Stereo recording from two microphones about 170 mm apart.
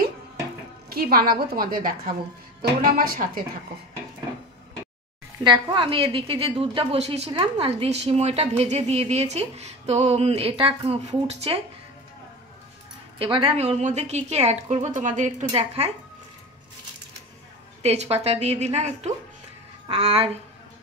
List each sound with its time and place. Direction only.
0.8 s a woman's voice: 60° right (ahead or behind)
5.4 s a woman's voice: 25° right (ahead or behind)
13.2 s a woman's voice: 30° right (ahead or behind)
17.8 s a woman's voice: 40° right (ahead or behind)